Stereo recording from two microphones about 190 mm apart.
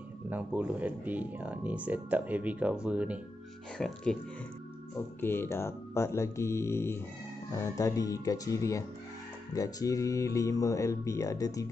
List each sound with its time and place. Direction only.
0.3 s speech: 10° right (ahead or behind)
5.2 s speech: 10° left (ahead or behind)